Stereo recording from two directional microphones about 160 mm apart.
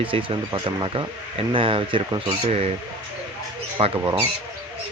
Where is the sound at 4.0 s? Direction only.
20° right (ahead or behind).